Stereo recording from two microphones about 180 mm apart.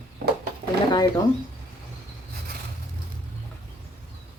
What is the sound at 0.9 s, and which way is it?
Speech, 20° left (ahead or behind).